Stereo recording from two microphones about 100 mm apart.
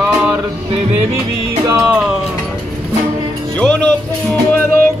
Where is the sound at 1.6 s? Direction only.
35° right (ahead or behind).